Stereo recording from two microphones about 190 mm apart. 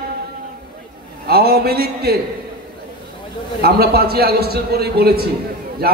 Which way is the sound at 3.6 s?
55° right (ahead or behind).